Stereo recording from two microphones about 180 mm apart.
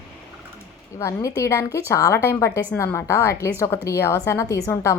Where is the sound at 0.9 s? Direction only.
15° left (ahead or behind).